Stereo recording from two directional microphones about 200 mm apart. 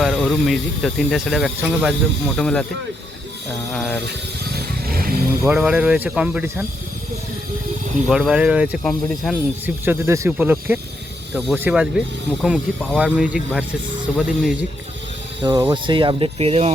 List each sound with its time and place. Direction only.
0.0 s speech: centre (ahead or behind)
3.7 s speech: 5° left (ahead or behind)
4.5 s vehicle: 45° right (ahead or behind)
5.4 s speech: 5° right (ahead or behind)
8.0 s speech: centre (ahead or behind)
9.6 s speech: 10° right (ahead or behind)
15.4 s speech: 20° right (ahead or behind)